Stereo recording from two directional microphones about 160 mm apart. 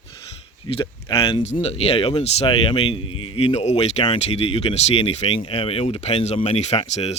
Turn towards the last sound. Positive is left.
turn(degrees=40)  # may be behind; listen again after turning